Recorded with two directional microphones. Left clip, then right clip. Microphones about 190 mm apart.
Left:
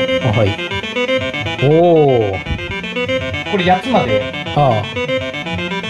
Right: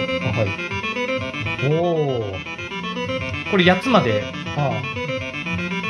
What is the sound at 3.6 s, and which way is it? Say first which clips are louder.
Speech: left 2 dB; 55° right (ahead or behind).